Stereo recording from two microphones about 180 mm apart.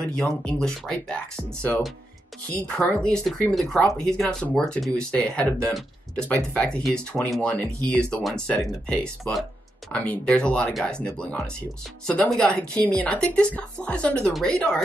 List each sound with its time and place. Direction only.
0.0 s a woman's voice: 5° left (ahead or behind)